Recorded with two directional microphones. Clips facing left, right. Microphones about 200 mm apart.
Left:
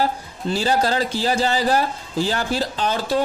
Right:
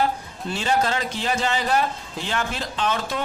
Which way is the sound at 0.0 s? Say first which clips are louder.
Left 2 dB; 35° left (ahead or behind).